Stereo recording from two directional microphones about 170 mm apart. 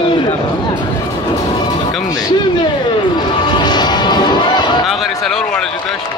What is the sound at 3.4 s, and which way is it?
Music, 25° left (ahead or behind).